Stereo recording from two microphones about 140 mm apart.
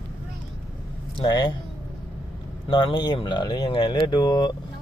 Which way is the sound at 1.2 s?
35° left (ahead or behind).